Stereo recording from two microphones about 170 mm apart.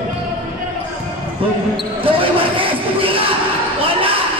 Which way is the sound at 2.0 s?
30° right (ahead or behind).